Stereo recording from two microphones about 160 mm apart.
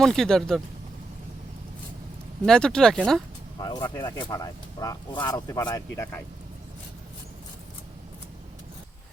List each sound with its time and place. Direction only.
0.0 s speech: 5° left (ahead or behind)
2.5 s speech: 5° left (ahead or behind)
3.6 s speech: 25° left (ahead or behind)